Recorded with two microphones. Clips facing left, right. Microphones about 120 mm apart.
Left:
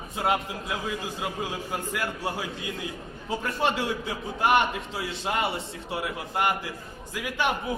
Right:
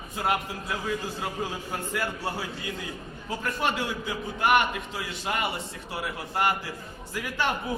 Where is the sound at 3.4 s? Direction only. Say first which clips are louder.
Left 1 dB; 25° left (ahead or behind).